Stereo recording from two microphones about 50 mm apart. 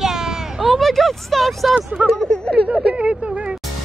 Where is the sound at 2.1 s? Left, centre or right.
Centre.